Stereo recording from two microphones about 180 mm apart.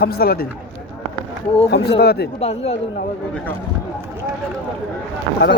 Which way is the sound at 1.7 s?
65° left (ahead or behind).